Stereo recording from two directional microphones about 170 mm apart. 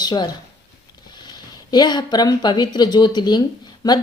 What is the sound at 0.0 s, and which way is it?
Speech, 25° left (ahead or behind).